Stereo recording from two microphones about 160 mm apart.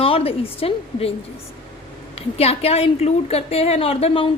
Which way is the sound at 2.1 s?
40° left (ahead or behind).